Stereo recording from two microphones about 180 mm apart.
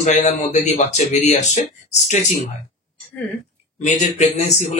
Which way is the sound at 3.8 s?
40° left (ahead or behind).